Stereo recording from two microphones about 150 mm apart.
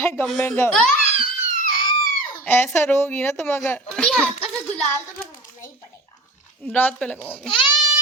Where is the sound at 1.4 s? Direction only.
65° left (ahead or behind).